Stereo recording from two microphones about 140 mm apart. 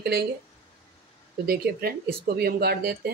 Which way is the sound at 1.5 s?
90° right.